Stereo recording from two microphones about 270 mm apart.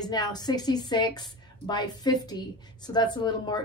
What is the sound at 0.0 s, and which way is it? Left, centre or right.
A woman's voice, centre.